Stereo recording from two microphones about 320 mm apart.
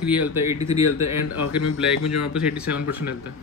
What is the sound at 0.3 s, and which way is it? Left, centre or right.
Speech, centre.